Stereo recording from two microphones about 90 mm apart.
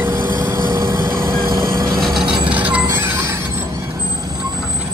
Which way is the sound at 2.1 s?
65° right (ahead or behind).